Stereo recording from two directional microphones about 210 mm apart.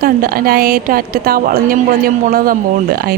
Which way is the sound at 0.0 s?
45° right (ahead or behind).